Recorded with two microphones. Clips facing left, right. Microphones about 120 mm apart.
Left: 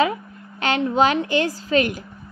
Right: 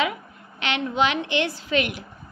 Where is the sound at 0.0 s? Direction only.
40° left (ahead or behind).